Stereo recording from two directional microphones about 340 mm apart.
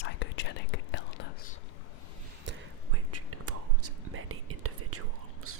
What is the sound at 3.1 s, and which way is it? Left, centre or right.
Whispering, right.